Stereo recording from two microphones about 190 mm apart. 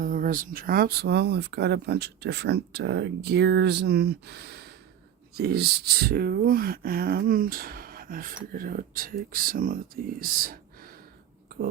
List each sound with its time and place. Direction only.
0.0 s speech: 45° right (ahead or behind)